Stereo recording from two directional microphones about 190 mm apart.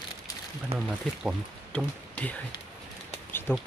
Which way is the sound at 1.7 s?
5° left (ahead or behind).